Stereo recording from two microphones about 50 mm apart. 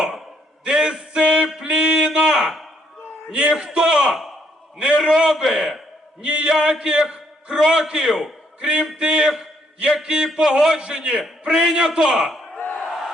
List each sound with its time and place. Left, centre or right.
0.7 s a sound: centre
3.5 s a man's voice: centre
6.2 s a man's voice: right
12.5 s battle cry: left